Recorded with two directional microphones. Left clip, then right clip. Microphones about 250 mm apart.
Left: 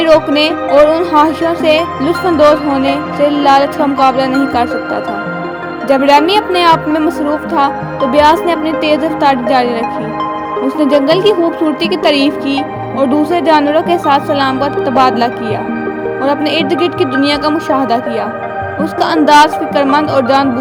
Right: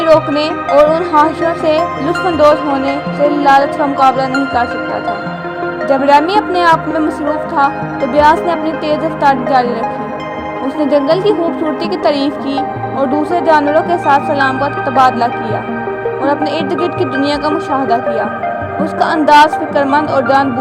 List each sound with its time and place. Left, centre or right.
0.0 s music: left
5.9 s music: left
10.8 s music: left